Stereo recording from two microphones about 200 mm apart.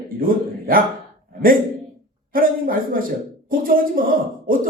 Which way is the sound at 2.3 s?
45° right (ahead or behind).